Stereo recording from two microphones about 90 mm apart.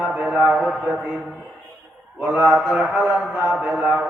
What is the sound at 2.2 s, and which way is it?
Mantra, 15° right (ahead or behind).